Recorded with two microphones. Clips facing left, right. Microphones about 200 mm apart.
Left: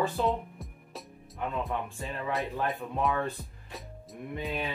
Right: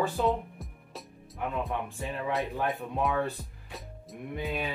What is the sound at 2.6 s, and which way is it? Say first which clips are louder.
Speech: even; centre (ahead or behind).